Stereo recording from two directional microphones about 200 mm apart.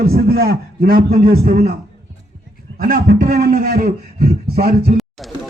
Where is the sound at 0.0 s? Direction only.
45° right (ahead or behind).